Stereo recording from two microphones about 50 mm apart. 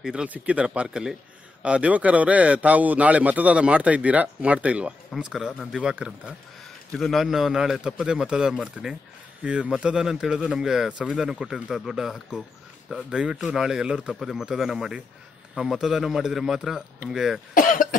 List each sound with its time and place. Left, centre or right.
0.0 s speech: centre
0.8 s a man's voice: centre
1.6 s speech: right
7.0 s a man's voice: centre
10.9 s a man's voice: right